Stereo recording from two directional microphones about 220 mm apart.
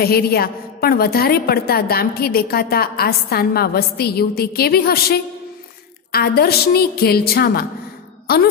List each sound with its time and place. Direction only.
0.0 s a woman's voice: 45° left (ahead or behind)